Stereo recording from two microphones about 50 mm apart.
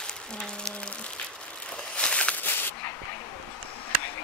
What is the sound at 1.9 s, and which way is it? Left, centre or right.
Walk, left.